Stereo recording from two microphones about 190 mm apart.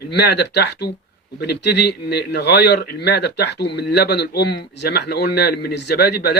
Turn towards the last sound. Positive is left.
turn(degrees=55)  # may be behind; listen again after turning